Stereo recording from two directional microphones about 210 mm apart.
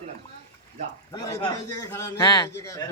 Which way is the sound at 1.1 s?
15° left (ahead or behind).